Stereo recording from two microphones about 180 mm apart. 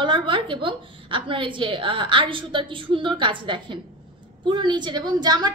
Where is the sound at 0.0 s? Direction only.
25° right (ahead or behind).